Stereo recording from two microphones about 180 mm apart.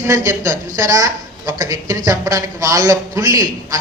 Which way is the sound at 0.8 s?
20° right (ahead or behind).